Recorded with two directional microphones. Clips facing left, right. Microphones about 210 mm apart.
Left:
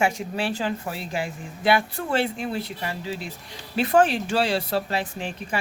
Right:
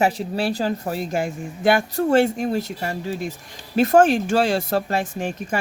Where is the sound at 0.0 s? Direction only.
35° right (ahead or behind).